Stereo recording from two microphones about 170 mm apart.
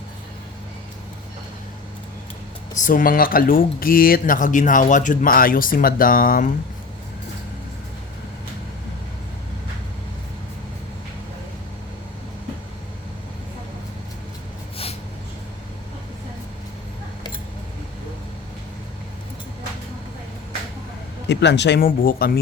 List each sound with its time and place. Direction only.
2.8 s speech: 55° left (ahead or behind)
21.2 s speech: 90° left
21.8 s speech: 55° left (ahead or behind)